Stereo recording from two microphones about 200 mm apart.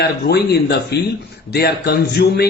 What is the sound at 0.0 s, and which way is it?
A man's voice, 55° left (ahead or behind).